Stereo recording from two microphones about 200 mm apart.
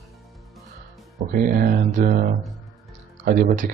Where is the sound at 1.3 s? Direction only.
45° right (ahead or behind).